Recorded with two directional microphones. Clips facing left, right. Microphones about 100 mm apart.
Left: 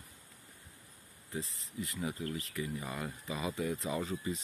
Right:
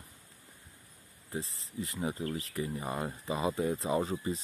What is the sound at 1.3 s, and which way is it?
Speech, 35° right (ahead or behind).